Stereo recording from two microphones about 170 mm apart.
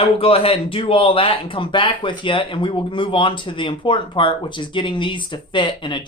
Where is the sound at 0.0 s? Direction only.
35° left (ahead or behind).